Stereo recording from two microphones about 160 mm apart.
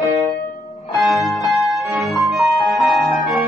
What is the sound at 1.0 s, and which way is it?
Music, centre (ahead or behind).